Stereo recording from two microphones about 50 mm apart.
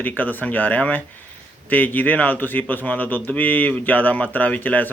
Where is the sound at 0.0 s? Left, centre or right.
Left.